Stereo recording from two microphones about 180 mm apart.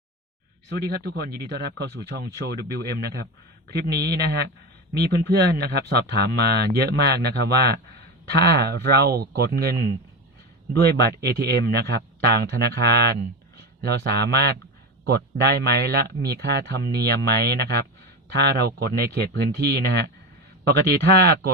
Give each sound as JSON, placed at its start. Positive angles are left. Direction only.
{"t": 0.8, "sound": "speech", "side_deg": -60}